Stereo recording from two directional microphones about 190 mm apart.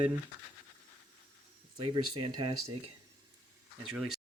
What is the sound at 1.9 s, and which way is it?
Speech, 25° right (ahead or behind).